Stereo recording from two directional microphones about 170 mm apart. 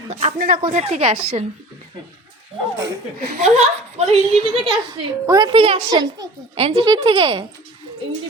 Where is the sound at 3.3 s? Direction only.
40° right (ahead or behind).